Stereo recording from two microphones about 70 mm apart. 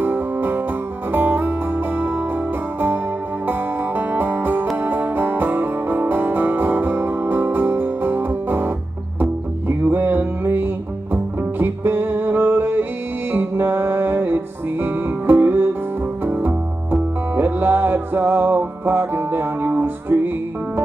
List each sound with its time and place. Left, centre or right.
0.0 s music: right